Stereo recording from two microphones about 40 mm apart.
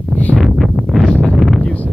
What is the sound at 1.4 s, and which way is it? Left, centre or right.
Wind noise, centre.